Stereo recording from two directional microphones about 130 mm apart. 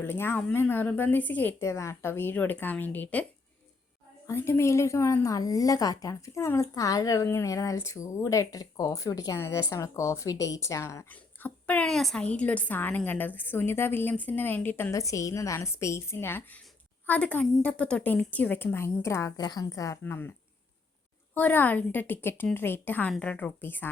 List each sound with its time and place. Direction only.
0.0 s speech: 15° left (ahead or behind)
4.3 s speech: 20° left (ahead or behind)
21.3 s speech: 15° left (ahead or behind)